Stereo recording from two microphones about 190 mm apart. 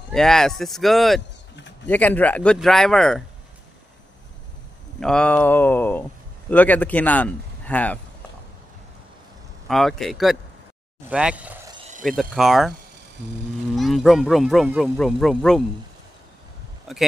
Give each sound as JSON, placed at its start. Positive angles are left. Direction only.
{"t": 0.1, "sound": "speech", "side_deg": 0}
{"t": 5.0, "sound": "speech", "side_deg": 5}
{"t": 9.7, "sound": "speech", "side_deg": 0}
{"t": 11.9, "sound": "a sound", "side_deg": -45}
{"t": 12.2, "sound": "speech", "side_deg": 0}
{"t": 13.7, "sound": "speech", "side_deg": 0}
{"t": 16.9, "sound": "speech", "side_deg": 0}